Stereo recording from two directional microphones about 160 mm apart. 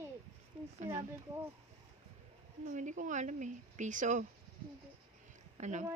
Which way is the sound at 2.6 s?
50° right (ahead or behind).